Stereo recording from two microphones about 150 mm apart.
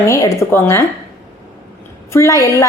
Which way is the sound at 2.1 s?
20° left (ahead or behind).